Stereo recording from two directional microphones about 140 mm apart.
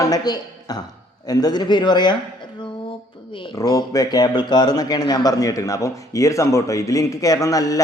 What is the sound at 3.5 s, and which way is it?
A man's voice, 25° left (ahead or behind).